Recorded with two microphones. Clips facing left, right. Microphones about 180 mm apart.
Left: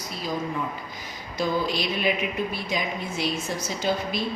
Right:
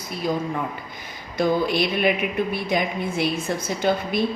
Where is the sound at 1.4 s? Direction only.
60° right (ahead or behind).